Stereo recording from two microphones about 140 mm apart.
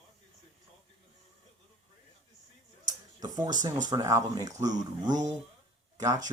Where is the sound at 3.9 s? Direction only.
25° right (ahead or behind).